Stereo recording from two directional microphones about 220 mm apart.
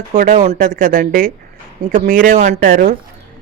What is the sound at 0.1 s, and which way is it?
Speech, 35° right (ahead or behind).